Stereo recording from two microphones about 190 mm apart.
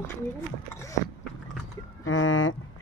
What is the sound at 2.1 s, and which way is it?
Speech, 90° left.